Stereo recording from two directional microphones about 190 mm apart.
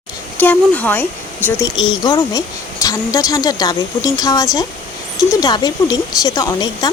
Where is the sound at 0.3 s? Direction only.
10° left (ahead or behind).